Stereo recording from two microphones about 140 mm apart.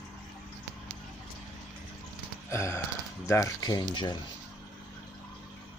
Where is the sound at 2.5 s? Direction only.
20° left (ahead or behind).